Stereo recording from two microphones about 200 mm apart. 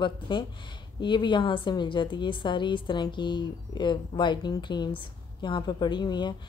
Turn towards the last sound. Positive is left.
turn(degrees=20)  # may be behind; listen again after turning